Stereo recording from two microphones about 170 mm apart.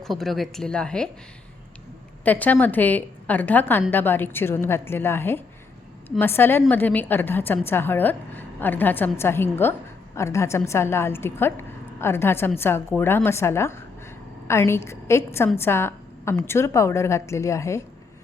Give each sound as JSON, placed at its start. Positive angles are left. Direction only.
{"t": 0.0, "sound": "a woman's voice", "side_deg": 0}
{"t": 2.2, "sound": "a woman's voice", "side_deg": 10}